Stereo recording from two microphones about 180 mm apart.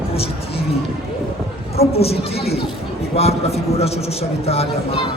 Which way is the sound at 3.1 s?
35° left (ahead or behind).